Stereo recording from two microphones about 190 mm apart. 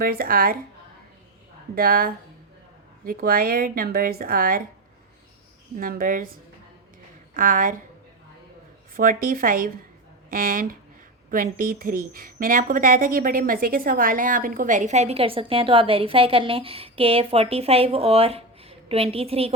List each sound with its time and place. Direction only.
0.0 s speech: 50° right (ahead or behind)
1.7 s speech: 50° right (ahead or behind)
5.7 s speech: 50° right (ahead or behind)
7.3 s speech: 45° right (ahead or behind)
9.0 s a woman's voice: 45° right (ahead or behind); by 19.5 s 30° right (ahead or behind)